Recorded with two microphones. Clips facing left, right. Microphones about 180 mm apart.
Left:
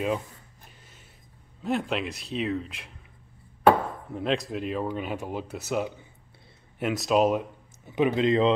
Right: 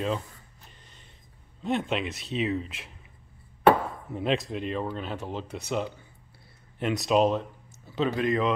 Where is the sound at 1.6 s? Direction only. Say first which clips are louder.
Even; centre (ahead or behind).